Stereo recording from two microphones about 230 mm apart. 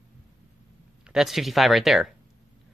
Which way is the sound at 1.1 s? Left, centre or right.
Centre.